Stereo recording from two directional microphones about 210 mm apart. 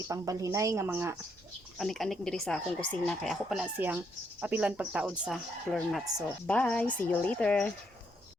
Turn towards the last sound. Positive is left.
turn(degrees=5)  # may be behind; listen again after turning